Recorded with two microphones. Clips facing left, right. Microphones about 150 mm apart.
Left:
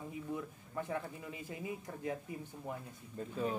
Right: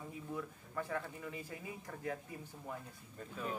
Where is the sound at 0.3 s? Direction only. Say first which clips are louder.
Even; 20° left (ahead or behind).